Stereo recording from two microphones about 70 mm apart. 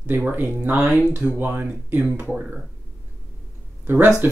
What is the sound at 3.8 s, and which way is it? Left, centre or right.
Speech, right.